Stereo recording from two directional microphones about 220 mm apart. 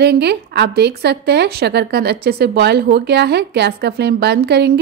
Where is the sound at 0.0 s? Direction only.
50° right (ahead or behind).